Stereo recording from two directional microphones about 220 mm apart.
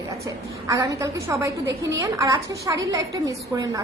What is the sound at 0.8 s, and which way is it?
A woman's voice, 15° right (ahead or behind).